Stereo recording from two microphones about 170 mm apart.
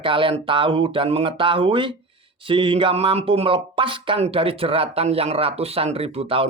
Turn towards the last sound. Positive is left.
turn(degrees=-35)  # may be behind; listen again after turning